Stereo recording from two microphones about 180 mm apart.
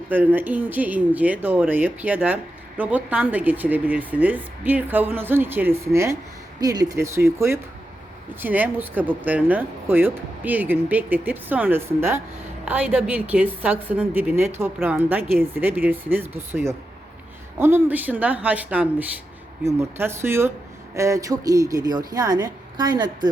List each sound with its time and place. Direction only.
0.1 s speech: 10° right (ahead or behind)